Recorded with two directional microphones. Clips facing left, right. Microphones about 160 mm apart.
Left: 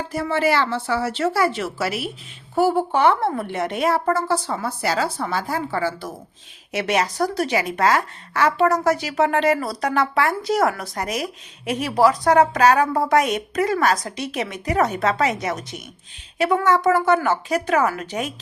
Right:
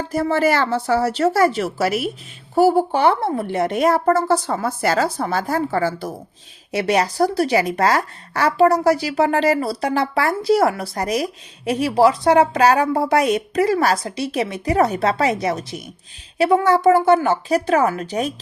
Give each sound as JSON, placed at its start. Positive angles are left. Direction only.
{"t": 0.1, "sound": "a woman's voice", "side_deg": -40}
{"t": 6.7, "sound": "speech", "side_deg": -35}